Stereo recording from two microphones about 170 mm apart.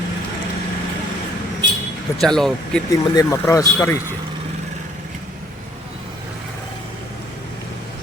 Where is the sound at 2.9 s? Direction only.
20° left (ahead or behind).